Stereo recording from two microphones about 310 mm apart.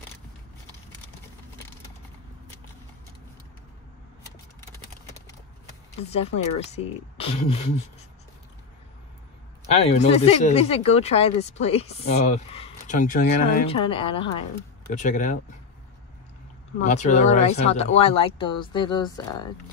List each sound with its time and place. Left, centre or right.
6.0 s speech: centre
9.8 s speech: centre
16.8 s speech: left